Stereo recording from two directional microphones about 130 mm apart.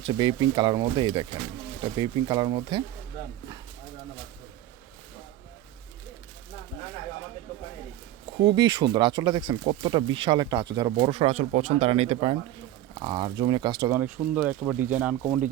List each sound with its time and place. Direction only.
0.1 s speech: 35° right (ahead or behind)
8.4 s speech: 35° right (ahead or behind)
13.9 s speech: 10° right (ahead or behind)